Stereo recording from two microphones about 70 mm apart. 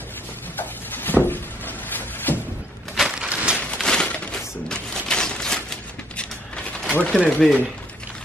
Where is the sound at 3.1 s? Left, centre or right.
Centre.